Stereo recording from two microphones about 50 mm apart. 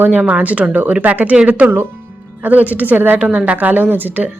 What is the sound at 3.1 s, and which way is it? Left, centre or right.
Speech, right.